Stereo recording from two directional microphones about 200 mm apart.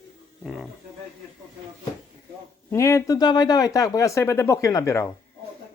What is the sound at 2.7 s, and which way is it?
Speech, 15° left (ahead or behind).